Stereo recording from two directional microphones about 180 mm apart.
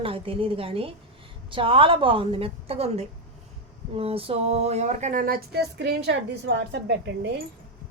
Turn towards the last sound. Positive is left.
turn(degrees=-75)  # may be behind; listen again after turning